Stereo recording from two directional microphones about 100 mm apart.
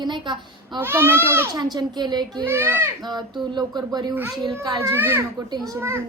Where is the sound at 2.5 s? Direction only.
25° right (ahead or behind).